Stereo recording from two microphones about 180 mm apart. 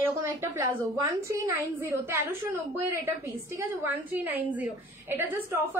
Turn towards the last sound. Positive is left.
turn(degrees=-10)  # may be behind; listen again after turning